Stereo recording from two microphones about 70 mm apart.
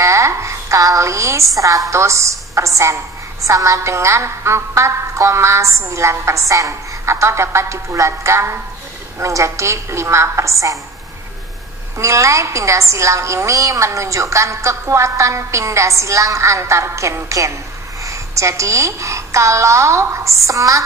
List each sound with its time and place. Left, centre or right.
0.0 s a sound: right
1.9 s a woman's voice: right
12.0 s a woman's voice: right